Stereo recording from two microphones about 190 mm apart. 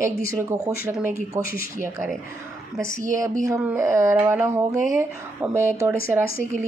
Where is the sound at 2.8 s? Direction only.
15° right (ahead or behind).